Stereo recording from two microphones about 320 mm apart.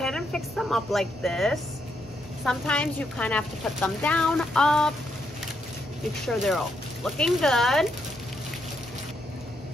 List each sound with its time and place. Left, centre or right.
0.0 s a woman's voice: centre
6.2 s a woman's voice: centre